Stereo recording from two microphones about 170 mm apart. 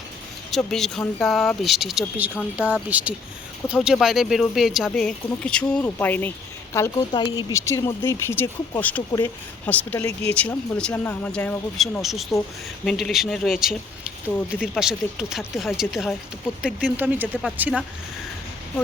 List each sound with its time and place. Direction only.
0.5 s speech: 5° left (ahead or behind)
12.3 s speech: centre (ahead or behind)